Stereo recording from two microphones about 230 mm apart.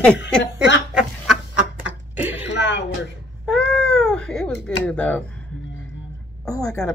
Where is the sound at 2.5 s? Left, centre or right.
Left.